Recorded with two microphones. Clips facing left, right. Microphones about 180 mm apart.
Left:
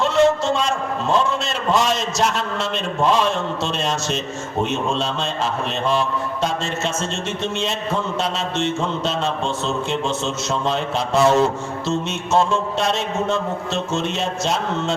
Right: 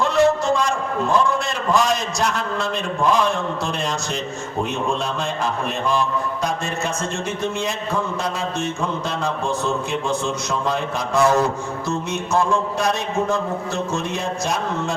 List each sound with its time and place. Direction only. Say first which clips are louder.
0.0 s a man's voice: left 1 dB; 25° left (ahead or behind)